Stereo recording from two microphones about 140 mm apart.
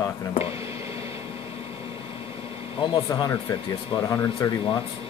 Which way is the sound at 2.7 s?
35° left (ahead or behind).